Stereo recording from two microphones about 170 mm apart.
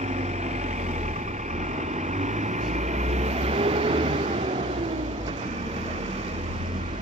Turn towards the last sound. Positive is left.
turn(degrees=-40)  # may be behind; listen again after turning